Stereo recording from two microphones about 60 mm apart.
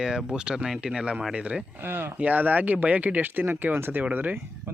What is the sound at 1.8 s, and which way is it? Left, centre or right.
Speech, right.